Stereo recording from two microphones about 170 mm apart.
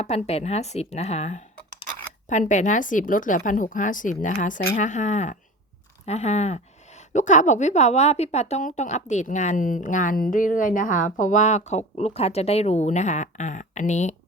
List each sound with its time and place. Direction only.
0.0 s speech: 40° left (ahead or behind)